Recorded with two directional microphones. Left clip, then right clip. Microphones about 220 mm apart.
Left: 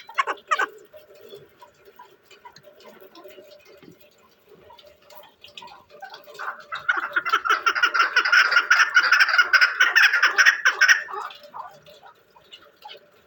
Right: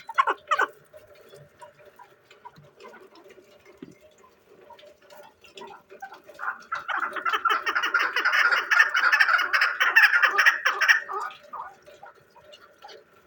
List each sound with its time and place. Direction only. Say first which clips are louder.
0.2 s cat: even; 50° right (ahead or behind)
6.8 s frog: left 5 dB; 30° right (ahead or behind)
9.0 s turkey: left 4 dB; 30° right (ahead or behind)